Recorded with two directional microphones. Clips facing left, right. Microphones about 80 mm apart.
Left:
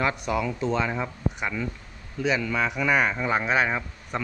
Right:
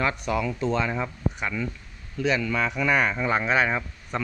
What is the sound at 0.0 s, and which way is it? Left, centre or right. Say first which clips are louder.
Speech: even; centre.